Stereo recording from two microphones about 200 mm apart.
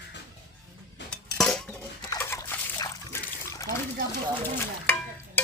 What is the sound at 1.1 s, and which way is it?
Dishes, 5° left (ahead or behind).